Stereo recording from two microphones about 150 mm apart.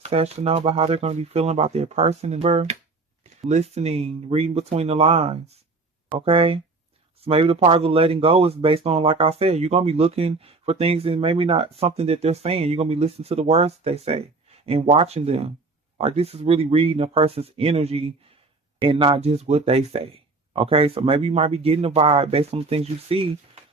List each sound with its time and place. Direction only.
0.0 s speech: 45° right (ahead or behind)